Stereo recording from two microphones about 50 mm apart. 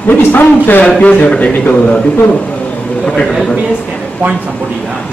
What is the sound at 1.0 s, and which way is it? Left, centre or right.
A man's voice, left.